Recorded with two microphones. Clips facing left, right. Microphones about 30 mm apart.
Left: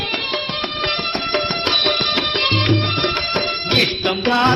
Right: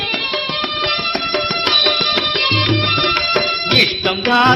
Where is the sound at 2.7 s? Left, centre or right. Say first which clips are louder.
Right 3 dB; right.